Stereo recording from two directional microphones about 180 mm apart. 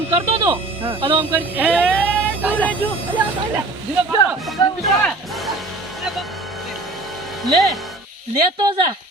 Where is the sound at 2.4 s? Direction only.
10° right (ahead or behind).